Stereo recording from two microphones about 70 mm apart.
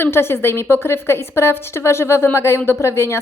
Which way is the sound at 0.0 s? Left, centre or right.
Left.